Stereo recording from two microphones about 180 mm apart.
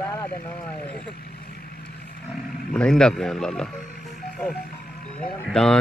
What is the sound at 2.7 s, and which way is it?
Speech, 5° left (ahead or behind).